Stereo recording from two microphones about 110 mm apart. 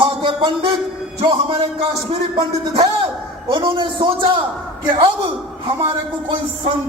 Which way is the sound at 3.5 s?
45° right (ahead or behind).